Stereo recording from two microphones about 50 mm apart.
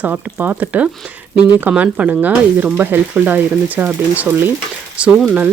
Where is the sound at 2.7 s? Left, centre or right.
Right.